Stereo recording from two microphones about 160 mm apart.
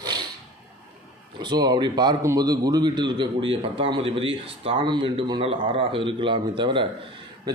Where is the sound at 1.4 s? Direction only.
25° right (ahead or behind).